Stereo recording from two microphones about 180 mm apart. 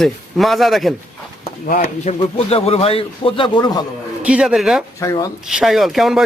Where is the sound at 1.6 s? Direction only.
45° left (ahead or behind); by 3.8 s 25° left (ahead or behind).